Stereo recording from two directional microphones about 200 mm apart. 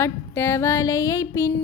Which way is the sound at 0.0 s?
15° left (ahead or behind).